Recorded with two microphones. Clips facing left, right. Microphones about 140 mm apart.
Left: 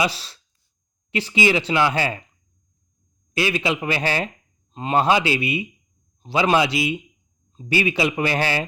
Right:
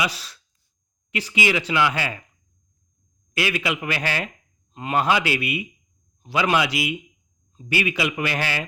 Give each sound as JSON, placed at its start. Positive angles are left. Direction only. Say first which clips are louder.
{"t": 0.0, "sound": "speech", "louder": "left 3 dB", "side_deg": 30}
{"t": 3.3, "sound": "speech", "louder": "left 3 dB", "side_deg": 25}